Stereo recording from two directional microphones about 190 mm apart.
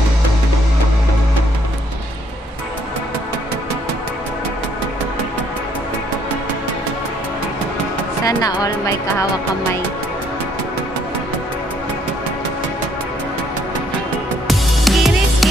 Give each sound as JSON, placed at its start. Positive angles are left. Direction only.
{"t": 8.3, "sound": "speech", "side_deg": 15}
{"t": 14.5, "sound": "music", "side_deg": 0}